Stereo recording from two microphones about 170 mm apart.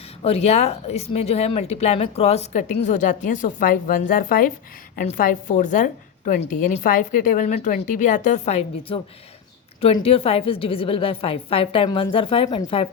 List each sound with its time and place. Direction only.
0.2 s a woman's voice: 40° left (ahead or behind)